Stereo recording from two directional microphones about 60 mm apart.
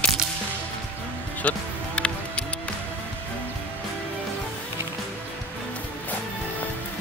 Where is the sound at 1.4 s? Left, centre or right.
Left.